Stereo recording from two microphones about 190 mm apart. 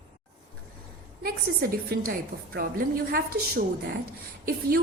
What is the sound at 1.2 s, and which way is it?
A woman's voice, 50° right (ahead or behind).